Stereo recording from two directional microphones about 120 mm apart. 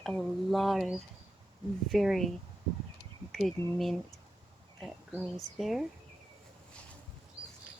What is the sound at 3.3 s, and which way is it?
Speech, centre (ahead or behind).